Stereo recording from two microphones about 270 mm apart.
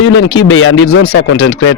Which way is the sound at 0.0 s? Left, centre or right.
Left.